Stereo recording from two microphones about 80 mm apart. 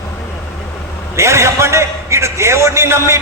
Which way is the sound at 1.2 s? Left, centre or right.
Right.